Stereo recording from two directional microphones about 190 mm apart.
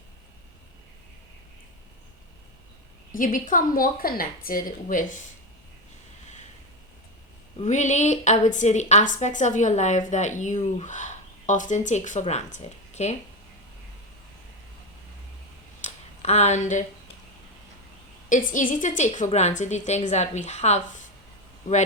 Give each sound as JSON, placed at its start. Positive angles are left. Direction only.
{"t": 3.1, "sound": "speech", "side_deg": 45}
{"t": 7.6, "sound": "a woman's voice", "side_deg": 40}
{"t": 15.8, "sound": "a sound", "side_deg": 35}
{"t": 18.3, "sound": "a woman's voice", "side_deg": 45}